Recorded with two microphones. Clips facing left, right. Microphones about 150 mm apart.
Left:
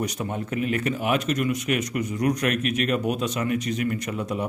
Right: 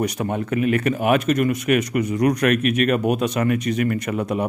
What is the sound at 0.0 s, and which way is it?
Speech, 65° right (ahead or behind).